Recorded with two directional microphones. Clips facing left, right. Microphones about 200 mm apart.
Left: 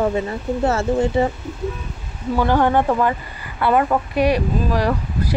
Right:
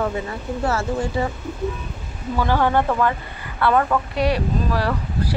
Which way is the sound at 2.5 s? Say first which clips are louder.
Left 2 dB; 15° left (ahead or behind).